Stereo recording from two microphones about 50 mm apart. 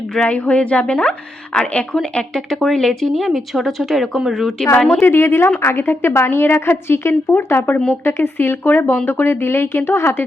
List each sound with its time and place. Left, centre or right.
0.3 s a woman's voice: left
2.6 s speech: centre
5.0 s a woman's voice: left